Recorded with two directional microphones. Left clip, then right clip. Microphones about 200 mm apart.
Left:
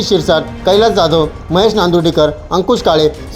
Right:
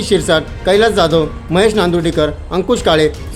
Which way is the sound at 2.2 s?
15° right (ahead or behind).